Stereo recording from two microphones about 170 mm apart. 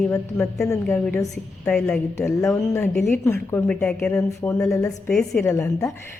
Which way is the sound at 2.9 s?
5° left (ahead or behind).